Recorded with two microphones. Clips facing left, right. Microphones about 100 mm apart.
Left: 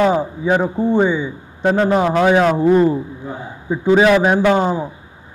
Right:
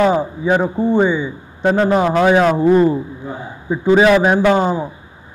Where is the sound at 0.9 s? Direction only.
25° right (ahead or behind).